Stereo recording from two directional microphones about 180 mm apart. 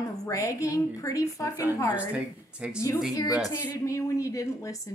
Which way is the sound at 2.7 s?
20° left (ahead or behind).